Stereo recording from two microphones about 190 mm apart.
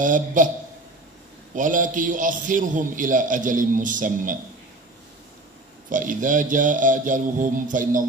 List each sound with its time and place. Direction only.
0.0 s a man's voice: 45° right (ahead or behind)
1.5 s a man's voice: 45° right (ahead or behind)
5.9 s a man's voice: 45° right (ahead or behind)